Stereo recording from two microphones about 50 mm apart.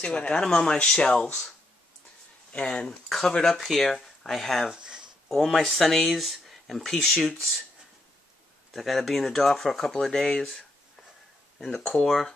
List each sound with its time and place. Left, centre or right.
0.0 s speech: left
2.5 s speech: centre
3.4 s speech: centre
4.6 s a sound: centre
5.3 s speech: centre
8.7 s speech: centre
10.1 s speech: centre
11.6 s speech: centre